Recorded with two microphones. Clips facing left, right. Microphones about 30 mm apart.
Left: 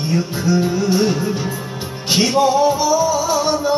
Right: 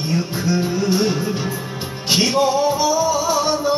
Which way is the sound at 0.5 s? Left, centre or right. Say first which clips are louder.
Left 3 dB; right.